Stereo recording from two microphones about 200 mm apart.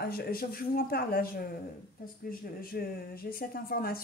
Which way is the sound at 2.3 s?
45° left (ahead or behind).